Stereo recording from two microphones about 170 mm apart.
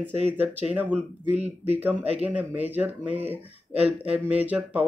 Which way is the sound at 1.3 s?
40° right (ahead or behind).